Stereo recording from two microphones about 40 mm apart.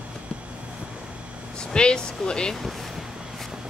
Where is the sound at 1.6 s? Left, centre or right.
Left.